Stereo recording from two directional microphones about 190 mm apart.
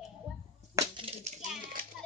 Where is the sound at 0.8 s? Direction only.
25° right (ahead or behind).